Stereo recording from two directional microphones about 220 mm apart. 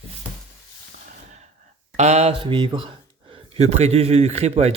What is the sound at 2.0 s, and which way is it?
A man's voice, 30° right (ahead or behind).